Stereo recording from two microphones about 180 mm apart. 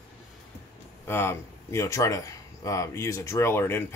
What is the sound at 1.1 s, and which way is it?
Speech, 15° left (ahead or behind).